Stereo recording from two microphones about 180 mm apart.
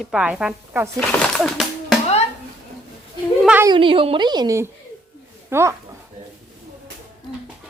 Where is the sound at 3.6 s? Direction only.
25° right (ahead or behind).